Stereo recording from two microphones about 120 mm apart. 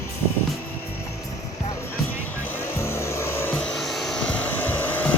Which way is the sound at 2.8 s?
25° left (ahead or behind).